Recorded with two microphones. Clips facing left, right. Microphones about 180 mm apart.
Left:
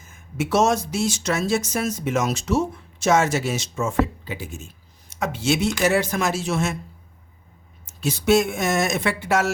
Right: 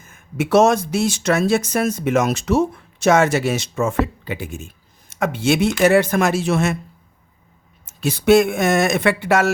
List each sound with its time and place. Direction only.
0.0 s speech: 60° right (ahead or behind)
8.0 s speech: 60° right (ahead or behind)